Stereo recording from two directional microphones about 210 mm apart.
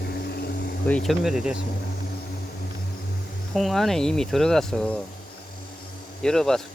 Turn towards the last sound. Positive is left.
turn(degrees=0)  # may be behind; listen again after turning